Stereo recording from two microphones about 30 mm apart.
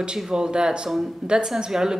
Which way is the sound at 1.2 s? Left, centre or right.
Right.